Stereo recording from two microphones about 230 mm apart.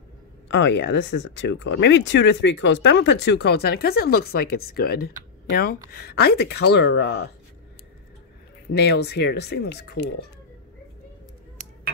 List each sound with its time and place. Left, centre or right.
0.5 s speech: left
8.7 s speech: left